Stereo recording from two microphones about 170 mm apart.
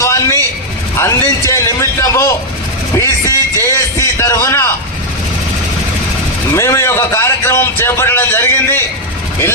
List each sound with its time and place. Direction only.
0.0 s vehicle: 15° left (ahead or behind)
0.9 s a man's voice: 15° left (ahead or behind)
2.9 s a sound: 15° left (ahead or behind)
6.6 s a man's voice: 15° left (ahead or behind)